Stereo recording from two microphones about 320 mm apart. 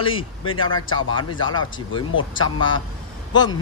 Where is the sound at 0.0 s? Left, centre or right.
Centre.